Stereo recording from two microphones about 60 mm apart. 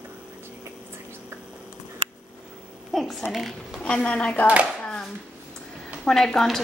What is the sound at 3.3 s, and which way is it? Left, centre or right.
Speech, centre.